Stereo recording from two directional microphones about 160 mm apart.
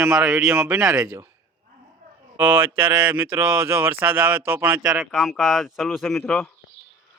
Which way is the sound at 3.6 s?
15° right (ahead or behind).